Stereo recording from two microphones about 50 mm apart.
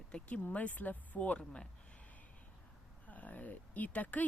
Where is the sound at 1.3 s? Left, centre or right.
Centre.